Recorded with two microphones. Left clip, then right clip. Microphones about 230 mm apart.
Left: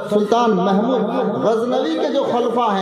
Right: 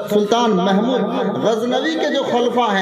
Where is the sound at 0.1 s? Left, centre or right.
Right.